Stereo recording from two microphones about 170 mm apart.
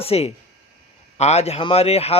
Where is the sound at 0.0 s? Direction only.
35° left (ahead or behind).